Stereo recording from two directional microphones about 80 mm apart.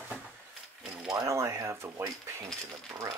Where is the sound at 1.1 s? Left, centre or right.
Right.